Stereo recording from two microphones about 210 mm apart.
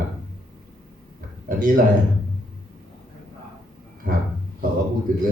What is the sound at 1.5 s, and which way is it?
Speech, 40° right (ahead or behind).